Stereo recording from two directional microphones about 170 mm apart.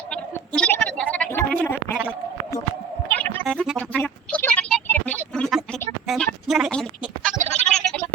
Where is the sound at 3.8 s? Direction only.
10° left (ahead or behind).